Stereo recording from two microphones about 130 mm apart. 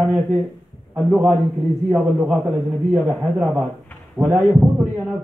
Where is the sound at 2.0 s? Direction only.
Centre (ahead or behind).